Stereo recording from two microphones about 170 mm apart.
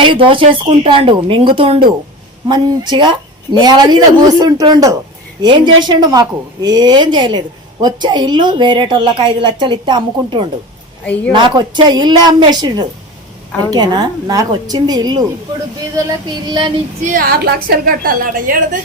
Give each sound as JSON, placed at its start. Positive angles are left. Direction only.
{"t": 0.0, "sound": "a woman's voice", "side_deg": -30}
{"t": 11.0, "sound": "a woman's voice", "side_deg": 10}
{"t": 11.3, "sound": "a woman's voice", "side_deg": -30}
{"t": 16.3, "sound": "a woman's voice", "side_deg": -30}
{"t": 17.0, "sound": "a woman's voice", "side_deg": -55}